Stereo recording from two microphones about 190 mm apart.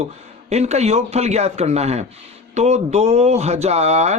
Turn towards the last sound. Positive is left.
turn(degrees=-35)  # may be behind; listen again after turning